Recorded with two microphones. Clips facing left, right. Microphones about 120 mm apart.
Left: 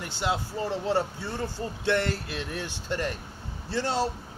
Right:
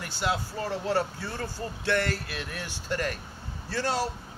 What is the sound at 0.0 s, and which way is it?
Speech, 20° left (ahead or behind).